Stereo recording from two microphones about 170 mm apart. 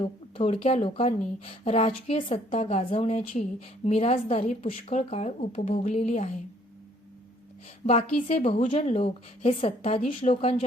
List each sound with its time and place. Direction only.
0.0 s speech: 35° left (ahead or behind)
7.8 s a woman's voice: 55° left (ahead or behind)
8.3 s speech: 40° left (ahead or behind)